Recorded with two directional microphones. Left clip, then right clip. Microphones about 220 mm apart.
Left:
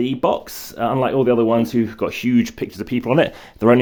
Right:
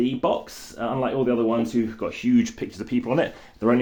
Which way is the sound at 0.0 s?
45° left (ahead or behind).